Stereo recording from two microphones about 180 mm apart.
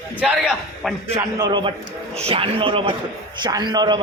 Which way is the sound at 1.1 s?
20° right (ahead or behind).